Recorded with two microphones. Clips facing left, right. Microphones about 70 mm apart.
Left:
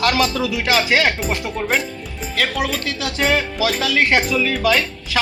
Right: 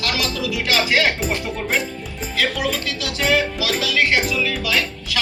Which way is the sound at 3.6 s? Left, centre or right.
Left.